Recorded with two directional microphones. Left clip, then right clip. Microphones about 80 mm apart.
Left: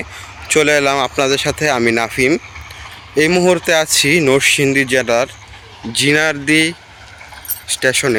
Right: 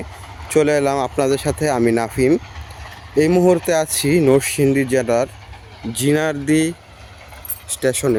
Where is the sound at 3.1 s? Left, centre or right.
Right.